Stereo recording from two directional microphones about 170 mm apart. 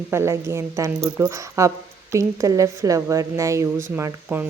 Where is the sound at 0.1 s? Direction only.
15° right (ahead or behind).